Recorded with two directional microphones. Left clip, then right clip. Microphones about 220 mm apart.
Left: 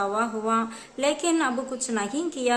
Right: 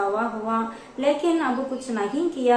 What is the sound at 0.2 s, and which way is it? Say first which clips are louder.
A woman's voice: even; 25° left (ahead or behind).